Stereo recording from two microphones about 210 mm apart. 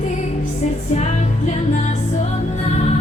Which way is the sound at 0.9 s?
35° left (ahead or behind).